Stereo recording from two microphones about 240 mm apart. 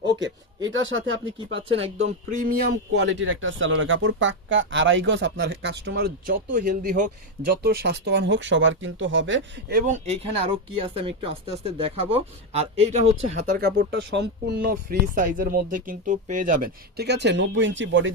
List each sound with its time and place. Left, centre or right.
0.2 s speech: right
2.3 s speech: right